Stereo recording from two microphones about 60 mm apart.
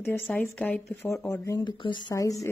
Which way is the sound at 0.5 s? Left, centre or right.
Left.